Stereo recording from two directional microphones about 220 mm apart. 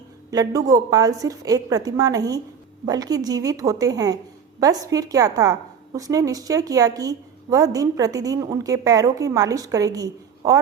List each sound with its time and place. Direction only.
0.3 s a woman's voice: 15° right (ahead or behind)